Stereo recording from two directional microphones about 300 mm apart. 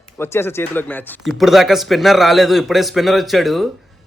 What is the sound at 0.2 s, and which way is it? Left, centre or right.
Speech, centre.